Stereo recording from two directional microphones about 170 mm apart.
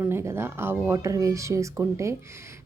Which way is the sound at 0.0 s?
15° right (ahead or behind).